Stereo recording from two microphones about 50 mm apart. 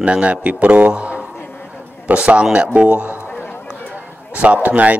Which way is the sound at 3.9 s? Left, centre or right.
Right.